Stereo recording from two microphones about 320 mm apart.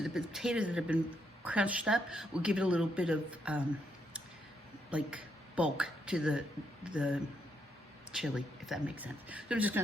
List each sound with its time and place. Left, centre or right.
0.0 s speech: centre
4.9 s a woman's voice: centre